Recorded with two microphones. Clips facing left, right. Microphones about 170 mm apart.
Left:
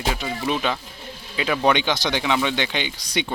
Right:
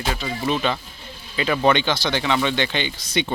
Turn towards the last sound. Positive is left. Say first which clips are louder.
# right 2 dB
turn(degrees=10)  # may be behind; listen again after turning